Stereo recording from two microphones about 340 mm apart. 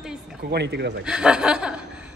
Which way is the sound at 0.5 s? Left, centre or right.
Right.